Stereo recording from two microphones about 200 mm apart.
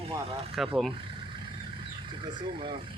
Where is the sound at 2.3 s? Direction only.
25° right (ahead or behind).